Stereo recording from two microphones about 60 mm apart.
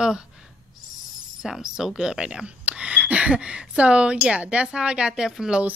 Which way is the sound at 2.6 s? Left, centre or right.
Right.